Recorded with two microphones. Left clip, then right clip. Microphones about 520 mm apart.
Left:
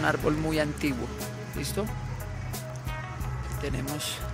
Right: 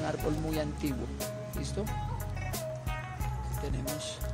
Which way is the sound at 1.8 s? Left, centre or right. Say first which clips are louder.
Left 5 dB; right.